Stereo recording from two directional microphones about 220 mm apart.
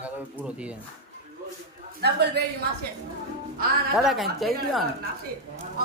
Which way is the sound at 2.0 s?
50° right (ahead or behind).